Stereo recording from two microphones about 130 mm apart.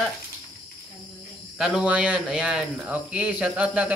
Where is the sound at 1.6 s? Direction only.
5° right (ahead or behind).